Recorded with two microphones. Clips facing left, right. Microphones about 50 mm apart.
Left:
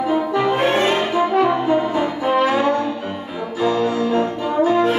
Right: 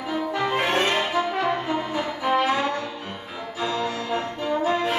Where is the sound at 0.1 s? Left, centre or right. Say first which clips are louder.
Left 4 dB; left.